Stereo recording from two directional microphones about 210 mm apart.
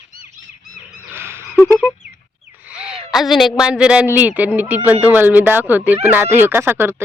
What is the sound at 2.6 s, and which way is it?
A woman's voice, 5° right (ahead or behind).